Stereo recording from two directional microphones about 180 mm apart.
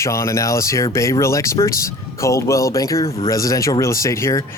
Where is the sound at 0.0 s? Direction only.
15° left (ahead or behind).